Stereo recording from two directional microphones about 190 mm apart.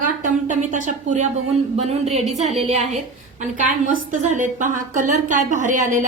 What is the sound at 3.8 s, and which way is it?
A woman's voice, 45° right (ahead or behind).